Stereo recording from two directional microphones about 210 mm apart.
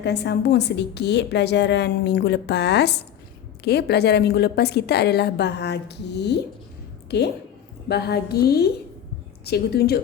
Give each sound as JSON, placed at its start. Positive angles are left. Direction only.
{"t": 0.0, "sound": "a woman's voice", "side_deg": 55}
{"t": 7.9, "sound": "a woman's voice", "side_deg": 50}